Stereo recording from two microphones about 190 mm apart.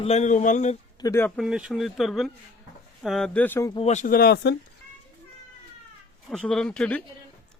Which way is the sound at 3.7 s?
35° left (ahead or behind).